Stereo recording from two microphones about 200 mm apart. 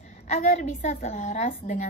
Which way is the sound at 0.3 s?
35° left (ahead or behind).